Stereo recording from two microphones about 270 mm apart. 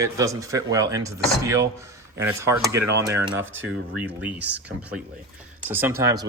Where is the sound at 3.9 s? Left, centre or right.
Centre.